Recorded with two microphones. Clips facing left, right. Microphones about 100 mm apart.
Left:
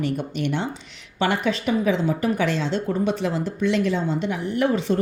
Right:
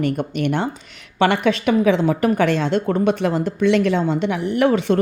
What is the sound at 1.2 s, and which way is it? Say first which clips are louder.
A woman's voice: right 5 dB; 65° right (ahead or behind).